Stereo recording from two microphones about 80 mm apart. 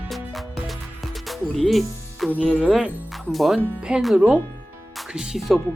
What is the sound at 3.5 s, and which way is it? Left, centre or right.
Speech, centre.